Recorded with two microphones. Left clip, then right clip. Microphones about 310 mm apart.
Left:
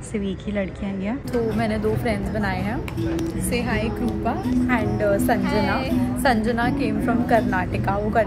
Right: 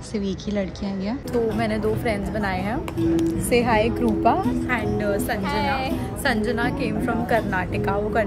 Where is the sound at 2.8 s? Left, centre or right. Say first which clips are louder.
Right 4 dB; right.